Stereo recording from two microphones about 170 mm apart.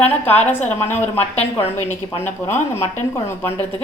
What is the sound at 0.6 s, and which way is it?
A woman's voice, 10° left (ahead or behind).